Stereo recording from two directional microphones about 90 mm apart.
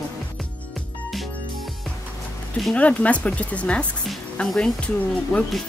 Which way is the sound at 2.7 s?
15° left (ahead or behind).